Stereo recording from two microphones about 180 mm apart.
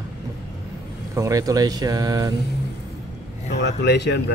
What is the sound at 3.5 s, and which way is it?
Speech, 70° left (ahead or behind).